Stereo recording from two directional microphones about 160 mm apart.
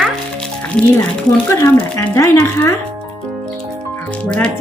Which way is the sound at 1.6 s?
20° left (ahead or behind).